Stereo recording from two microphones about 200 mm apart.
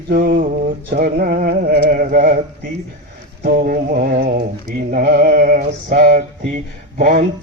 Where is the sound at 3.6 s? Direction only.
45° right (ahead or behind).